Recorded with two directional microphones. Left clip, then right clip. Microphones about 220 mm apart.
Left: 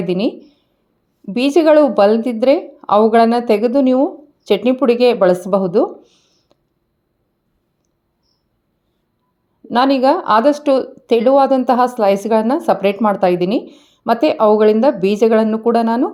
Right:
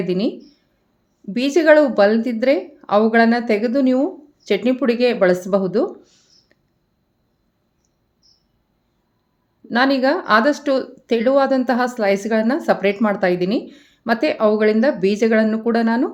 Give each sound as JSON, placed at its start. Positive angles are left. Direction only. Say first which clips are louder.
{"t": 0.0, "sound": "a woman's voice", "louder": "left 3 dB", "side_deg": 15}
{"t": 4.0, "sound": "a sound", "louder": "left 5 dB", "side_deg": 15}
{"t": 4.7, "sound": "speech", "louder": "left 6 dB", "side_deg": 15}
{"t": 9.6, "sound": "a woman's voice", "louder": "left 4 dB", "side_deg": 15}